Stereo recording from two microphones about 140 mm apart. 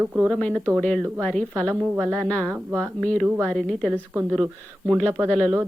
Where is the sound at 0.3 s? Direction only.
5° left (ahead or behind).